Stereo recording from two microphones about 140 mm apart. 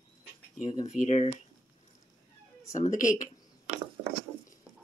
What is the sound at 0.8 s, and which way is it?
Speech, 55° left (ahead or behind).